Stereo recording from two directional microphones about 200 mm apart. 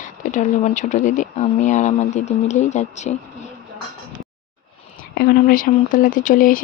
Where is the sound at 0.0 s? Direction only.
40° left (ahead or behind).